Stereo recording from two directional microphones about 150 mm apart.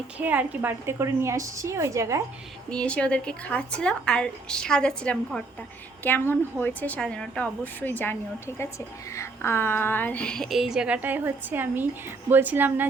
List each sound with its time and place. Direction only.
0.2 s a woman's voice: 10° right (ahead or behind)
2.6 s a woman's voice: 5° left (ahead or behind)
9.1 s a woman's voice: 15° left (ahead or behind); by 12.9 s 15° right (ahead or behind)